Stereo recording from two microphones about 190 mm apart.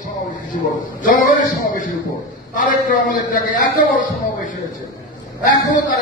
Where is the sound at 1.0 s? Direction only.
45° left (ahead or behind).